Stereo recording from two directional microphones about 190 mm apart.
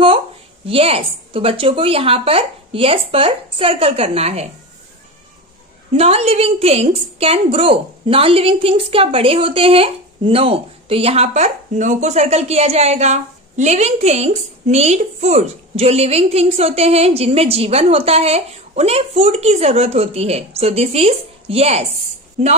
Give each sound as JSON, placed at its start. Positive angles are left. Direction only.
{"t": 0.7, "sound": "a woman's voice", "side_deg": -30}
{"t": 5.9, "sound": "a woman's voice", "side_deg": -35}